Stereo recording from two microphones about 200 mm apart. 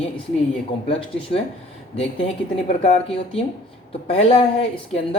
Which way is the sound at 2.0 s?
30° left (ahead or behind).